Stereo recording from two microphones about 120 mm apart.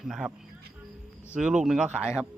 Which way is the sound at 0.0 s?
5° right (ahead or behind).